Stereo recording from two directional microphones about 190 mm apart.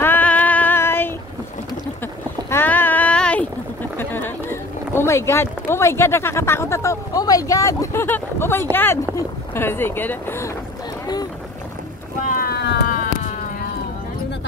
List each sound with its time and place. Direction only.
0.0 s female singing: 10° left (ahead or behind)
2.5 s a sound: 10° left (ahead or behind)
8.7 s speech: 10° left (ahead or behind)
12.3 s vehicle: 55° left (ahead or behind)